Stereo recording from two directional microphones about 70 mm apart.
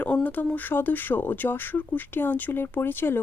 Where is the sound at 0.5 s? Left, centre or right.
Left.